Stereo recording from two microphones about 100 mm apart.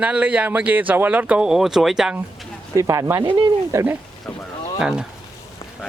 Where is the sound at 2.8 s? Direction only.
35° right (ahead or behind).